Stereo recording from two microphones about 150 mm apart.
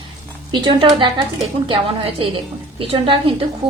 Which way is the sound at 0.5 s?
30° right (ahead or behind).